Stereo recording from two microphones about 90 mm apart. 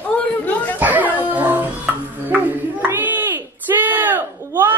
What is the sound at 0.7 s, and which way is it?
Dog, 20° right (ahead or behind).